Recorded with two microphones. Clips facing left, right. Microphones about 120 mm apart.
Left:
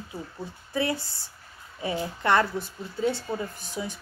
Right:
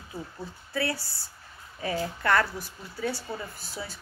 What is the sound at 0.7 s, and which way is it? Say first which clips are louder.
A woman's voice: left 3 dB; 20° left (ahead or behind).